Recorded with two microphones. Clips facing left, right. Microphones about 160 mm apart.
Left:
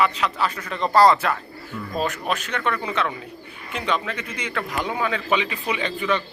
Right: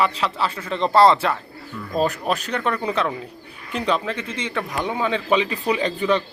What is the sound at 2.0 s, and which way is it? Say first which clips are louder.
Speech: right 4 dB; 35° right (ahead or behind).